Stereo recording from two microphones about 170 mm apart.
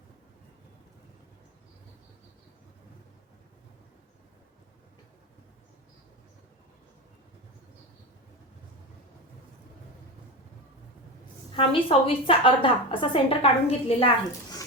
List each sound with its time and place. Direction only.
11.5 s a woman's voice: 35° left (ahead or behind)